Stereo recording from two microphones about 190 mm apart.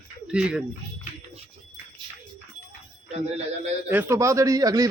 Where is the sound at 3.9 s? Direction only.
10° right (ahead or behind).